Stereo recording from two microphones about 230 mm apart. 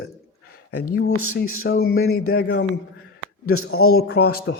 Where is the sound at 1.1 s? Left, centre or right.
Left.